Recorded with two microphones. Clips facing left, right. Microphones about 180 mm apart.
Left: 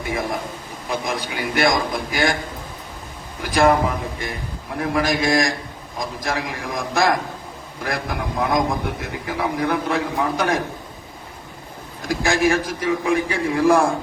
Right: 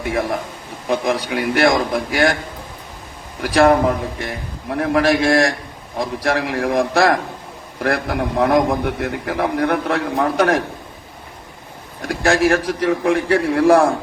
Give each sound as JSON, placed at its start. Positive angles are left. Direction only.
{"t": 0.0, "sound": "a man's voice", "side_deg": -70}
{"t": 3.4, "sound": "a man's voice", "side_deg": -70}
{"t": 12.0, "sound": "a man's voice", "side_deg": -70}